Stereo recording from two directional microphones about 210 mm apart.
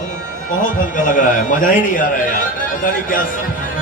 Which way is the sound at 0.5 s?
40° left (ahead or behind).